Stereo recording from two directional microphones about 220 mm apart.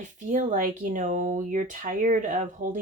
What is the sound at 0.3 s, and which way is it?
Speech, 35° right (ahead or behind).